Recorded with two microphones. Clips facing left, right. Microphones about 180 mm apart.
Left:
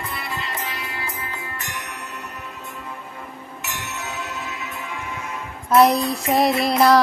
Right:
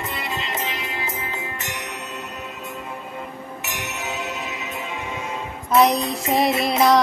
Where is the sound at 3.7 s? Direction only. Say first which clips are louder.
Right 1 dB; 20° right (ahead or behind).